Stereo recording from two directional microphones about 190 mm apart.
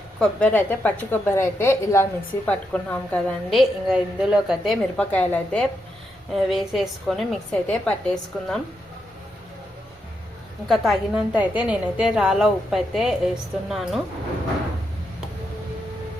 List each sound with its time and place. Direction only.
0.2 s a woman's voice: 5° left (ahead or behind)
10.7 s a woman's voice: centre (ahead or behind)